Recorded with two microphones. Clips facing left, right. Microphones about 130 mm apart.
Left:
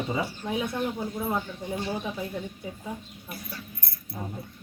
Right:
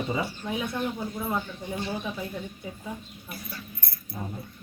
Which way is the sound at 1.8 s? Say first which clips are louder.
Even; 15° left (ahead or behind).